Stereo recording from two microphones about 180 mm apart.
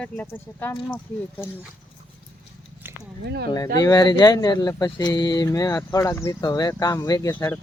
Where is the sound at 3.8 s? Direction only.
20° left (ahead or behind).